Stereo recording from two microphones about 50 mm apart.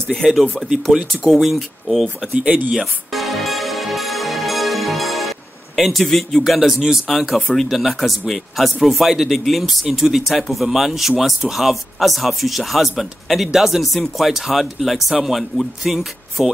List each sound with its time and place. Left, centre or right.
0.2 s speech: centre
2.3 s speech: right
2.7 s music: centre
5.8 s speech: centre
7.1 s speech: centre